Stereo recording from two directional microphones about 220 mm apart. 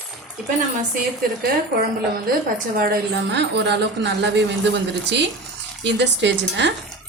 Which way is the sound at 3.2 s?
50° right (ahead or behind).